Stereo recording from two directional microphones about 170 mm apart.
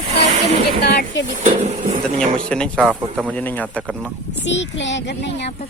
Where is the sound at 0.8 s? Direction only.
75° left (ahead or behind).